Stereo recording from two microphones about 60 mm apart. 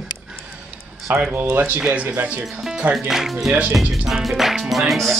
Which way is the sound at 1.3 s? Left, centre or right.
Right.